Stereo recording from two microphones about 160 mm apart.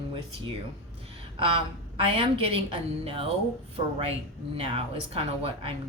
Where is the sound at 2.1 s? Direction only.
35° right (ahead or behind).